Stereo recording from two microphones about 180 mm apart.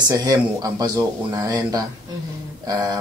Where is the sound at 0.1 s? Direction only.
20° right (ahead or behind).